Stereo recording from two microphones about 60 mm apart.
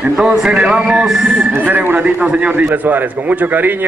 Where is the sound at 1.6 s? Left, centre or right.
Right.